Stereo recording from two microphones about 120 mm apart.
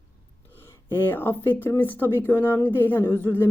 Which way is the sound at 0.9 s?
20° left (ahead or behind).